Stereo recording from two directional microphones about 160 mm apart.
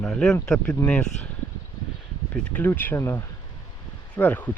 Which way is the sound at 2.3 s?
10° left (ahead or behind).